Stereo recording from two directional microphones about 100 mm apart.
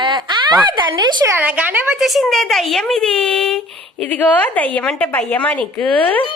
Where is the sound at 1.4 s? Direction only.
15° right (ahead or behind).